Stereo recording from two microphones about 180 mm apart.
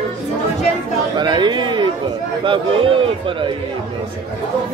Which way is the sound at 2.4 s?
30° right (ahead or behind).